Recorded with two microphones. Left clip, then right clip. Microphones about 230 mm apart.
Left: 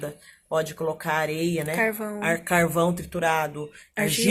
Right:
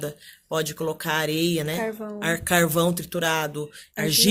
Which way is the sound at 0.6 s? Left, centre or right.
Right.